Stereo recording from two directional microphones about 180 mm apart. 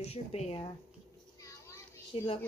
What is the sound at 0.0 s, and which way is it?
Speech, 35° left (ahead or behind).